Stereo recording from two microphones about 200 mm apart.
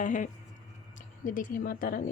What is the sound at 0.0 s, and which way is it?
Speech, 35° left (ahead or behind).